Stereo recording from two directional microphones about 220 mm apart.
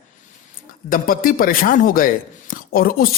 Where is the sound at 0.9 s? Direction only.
40° left (ahead or behind).